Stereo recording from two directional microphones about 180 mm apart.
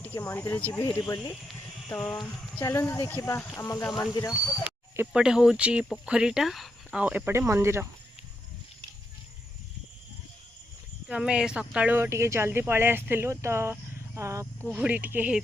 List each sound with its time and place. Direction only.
0.0 s speech: 10° left (ahead or behind)
4.9 s speech: 5° right (ahead or behind)
11.1 s speech: 5° right (ahead or behind)